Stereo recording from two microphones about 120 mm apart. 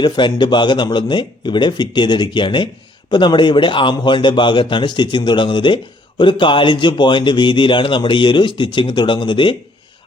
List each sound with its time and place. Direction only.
0.0 s speech: 40° left (ahead or behind)